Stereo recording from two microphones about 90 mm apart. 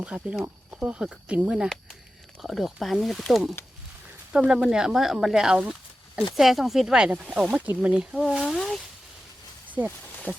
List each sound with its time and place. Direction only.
0.0 s speech: 10° right (ahead or behind)
8.1 s speech: centre (ahead or behind)
9.6 s a sound: 20° right (ahead or behind)